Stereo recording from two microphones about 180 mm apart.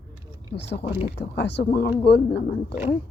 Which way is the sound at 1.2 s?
70° left (ahead or behind).